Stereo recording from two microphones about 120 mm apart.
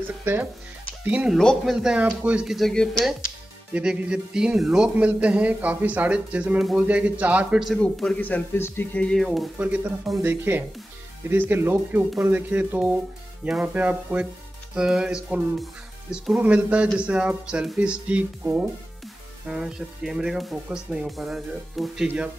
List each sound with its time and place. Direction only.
0.2 s speech: 15° right (ahead or behind)
1.4 s speech: 5° left (ahead or behind)
1.8 s speech: 5° right (ahead or behind)
3.7 s speech: 10° right (ahead or behind)
7.8 s speech: 10° left (ahead or behind)
9.6 s speech: 15° right (ahead or behind)